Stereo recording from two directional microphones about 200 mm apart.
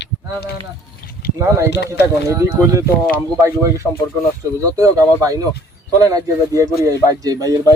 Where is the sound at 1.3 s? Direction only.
15° right (ahead or behind).